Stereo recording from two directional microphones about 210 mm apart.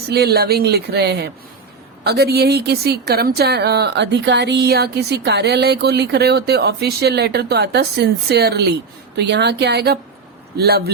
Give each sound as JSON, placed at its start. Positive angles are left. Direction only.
{"t": 0.1, "sound": "a woman's voice", "side_deg": -50}